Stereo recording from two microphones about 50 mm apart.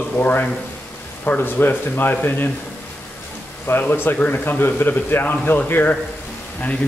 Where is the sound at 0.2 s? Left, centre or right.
Left.